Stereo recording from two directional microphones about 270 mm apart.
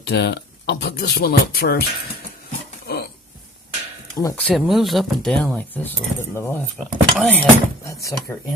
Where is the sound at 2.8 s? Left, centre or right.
Left.